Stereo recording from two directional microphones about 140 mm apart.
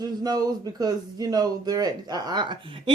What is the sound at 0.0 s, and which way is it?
A man's voice, 30° right (ahead or behind).